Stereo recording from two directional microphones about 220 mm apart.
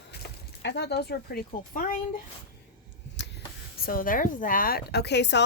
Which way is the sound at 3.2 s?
50° left (ahead or behind).